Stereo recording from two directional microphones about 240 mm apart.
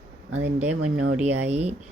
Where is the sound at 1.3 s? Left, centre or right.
Centre.